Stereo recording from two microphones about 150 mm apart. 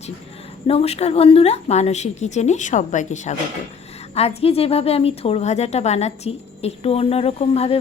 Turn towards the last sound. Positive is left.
turn(degrees=40)  # may be behind; listen again after turning